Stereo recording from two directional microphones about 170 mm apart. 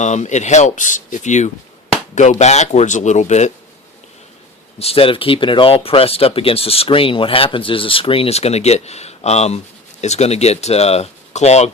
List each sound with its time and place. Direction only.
0.0 s speech: 45° left (ahead or behind)
4.8 s speech: 35° left (ahead or behind)